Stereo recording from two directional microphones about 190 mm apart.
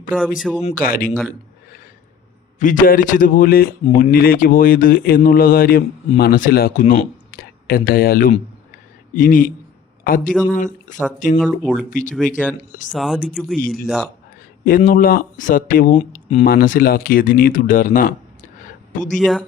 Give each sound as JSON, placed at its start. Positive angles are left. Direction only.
{"t": 0.3, "sound": "speech", "side_deg": 0}
{"t": 0.6, "sound": "speech", "side_deg": 45}
{"t": 2.6, "sound": "speech", "side_deg": 45}
{"t": 11.4, "sound": "speech", "side_deg": 5}
{"t": 11.9, "sound": "speech", "side_deg": 40}
{"t": 12.9, "sound": "speech", "side_deg": 0}
{"t": 13.6, "sound": "speech", "side_deg": 50}
{"t": 13.8, "sound": "speech", "side_deg": 0}
{"t": 14.8, "sound": "speech", "side_deg": 45}
{"t": 16.0, "sound": "speech", "side_deg": 35}
{"t": 16.5, "sound": "speech", "side_deg": 50}
{"t": 19.2, "sound": "speech", "side_deg": 0}